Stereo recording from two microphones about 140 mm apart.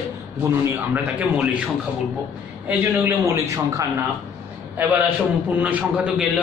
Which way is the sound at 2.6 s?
20° right (ahead or behind).